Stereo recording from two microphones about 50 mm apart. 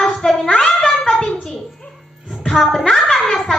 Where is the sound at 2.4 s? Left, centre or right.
Centre.